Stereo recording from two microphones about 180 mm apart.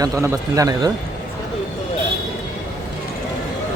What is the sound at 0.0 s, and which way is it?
Speech, 20° right (ahead or behind).